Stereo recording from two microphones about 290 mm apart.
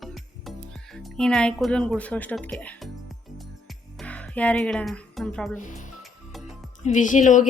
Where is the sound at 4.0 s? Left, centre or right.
Centre.